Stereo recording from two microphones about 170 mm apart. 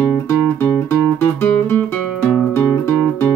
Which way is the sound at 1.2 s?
10° left (ahead or behind).